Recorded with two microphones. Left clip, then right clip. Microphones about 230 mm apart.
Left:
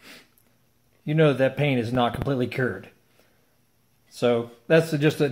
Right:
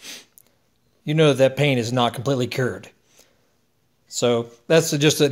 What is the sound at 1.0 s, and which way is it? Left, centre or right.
Speech, right.